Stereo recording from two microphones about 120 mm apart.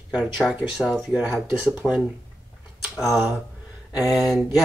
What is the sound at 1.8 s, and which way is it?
Speech, 10° left (ahead or behind).